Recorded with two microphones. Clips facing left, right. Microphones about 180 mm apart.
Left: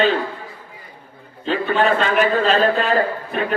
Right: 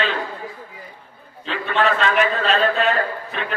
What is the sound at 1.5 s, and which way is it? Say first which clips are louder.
Speech: left 3 dB; 35° left (ahead or behind).